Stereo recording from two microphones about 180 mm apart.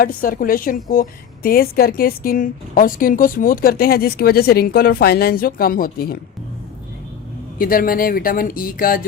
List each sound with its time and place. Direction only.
0.0 s a woman's voice: 50° left (ahead or behind)
7.6 s speech: 50° left (ahead or behind)